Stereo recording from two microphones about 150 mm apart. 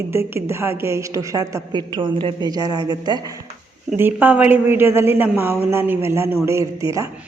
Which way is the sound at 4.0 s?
15° right (ahead or behind).